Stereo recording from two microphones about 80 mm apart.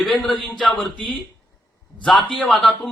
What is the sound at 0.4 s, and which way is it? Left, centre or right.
Speech, centre.